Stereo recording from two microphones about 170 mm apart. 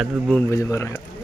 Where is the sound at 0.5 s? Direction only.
15° left (ahead or behind).